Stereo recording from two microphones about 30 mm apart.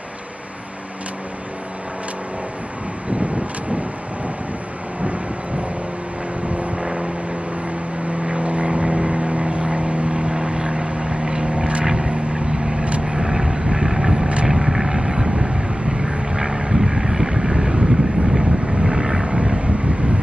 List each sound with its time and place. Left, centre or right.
5.0 s vehicle: right
6.8 s vehicle: right
8.3 s vehicle: right
11.8 s vehicle: right
15.0 s boat: right
16.0 s vehicle: right
19.2 s vehicle: right